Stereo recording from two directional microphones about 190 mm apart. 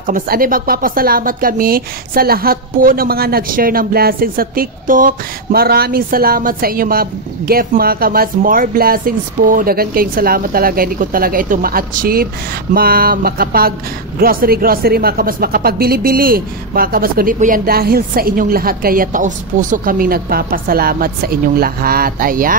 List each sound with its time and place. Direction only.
0.0 s speech: 45° right (ahead or behind)